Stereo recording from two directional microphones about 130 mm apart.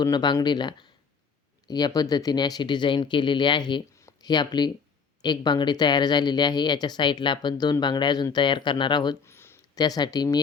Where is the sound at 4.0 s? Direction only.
30° left (ahead or behind).